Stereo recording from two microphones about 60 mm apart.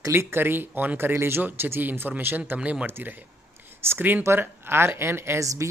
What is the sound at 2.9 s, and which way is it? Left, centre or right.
Speech, right.